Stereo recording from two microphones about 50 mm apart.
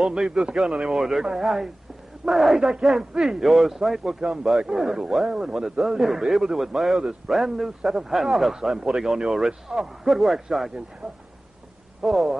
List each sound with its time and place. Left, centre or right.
0.0 s a man's voice: centre
12.0 s speech: centre